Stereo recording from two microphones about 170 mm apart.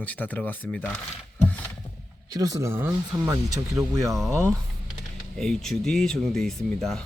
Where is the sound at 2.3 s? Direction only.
20° right (ahead or behind).